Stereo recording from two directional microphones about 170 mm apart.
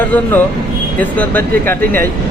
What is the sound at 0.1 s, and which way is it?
A man's voice, 10° left (ahead or behind).